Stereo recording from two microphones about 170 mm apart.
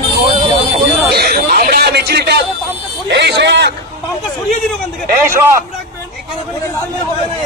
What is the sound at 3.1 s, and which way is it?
Speech, 90° right.